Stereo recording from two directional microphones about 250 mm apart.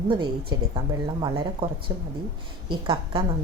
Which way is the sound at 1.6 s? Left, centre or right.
Right.